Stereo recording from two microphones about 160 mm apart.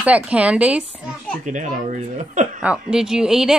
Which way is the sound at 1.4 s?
50° right (ahead or behind).